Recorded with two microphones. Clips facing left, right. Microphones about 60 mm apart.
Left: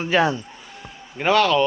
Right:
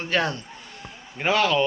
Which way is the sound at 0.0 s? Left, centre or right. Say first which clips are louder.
Left 5 dB; centre.